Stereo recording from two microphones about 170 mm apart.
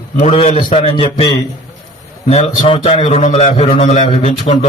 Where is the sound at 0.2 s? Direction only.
40° left (ahead or behind).